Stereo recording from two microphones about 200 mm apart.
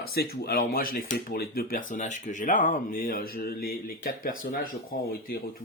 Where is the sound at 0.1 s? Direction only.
50° left (ahead or behind).